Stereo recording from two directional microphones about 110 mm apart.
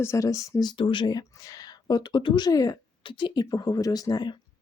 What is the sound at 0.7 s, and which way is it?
Speech, 50° left (ahead or behind).